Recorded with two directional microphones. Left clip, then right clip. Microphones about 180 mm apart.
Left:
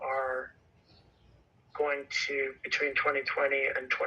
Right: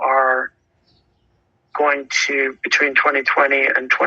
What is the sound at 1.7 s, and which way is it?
Speech, 45° right (ahead or behind).